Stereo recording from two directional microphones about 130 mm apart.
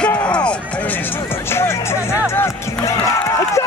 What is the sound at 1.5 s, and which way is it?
Music, 20° left (ahead or behind).